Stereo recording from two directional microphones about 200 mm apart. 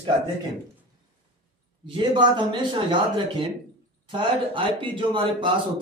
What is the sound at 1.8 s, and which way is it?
Speech, 25° right (ahead or behind).